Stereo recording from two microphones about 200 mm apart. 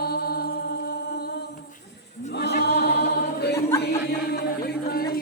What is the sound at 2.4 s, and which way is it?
Choir, 55° left (ahead or behind).